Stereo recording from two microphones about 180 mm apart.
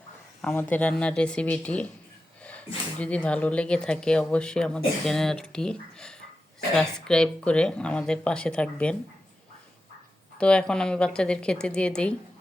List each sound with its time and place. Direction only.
0.4 s speech: 10° left (ahead or behind)
2.4 s a sound: 5° left (ahead or behind)
3.0 s speech: 5° left (ahead or behind)
10.3 s speech: 5° left (ahead or behind)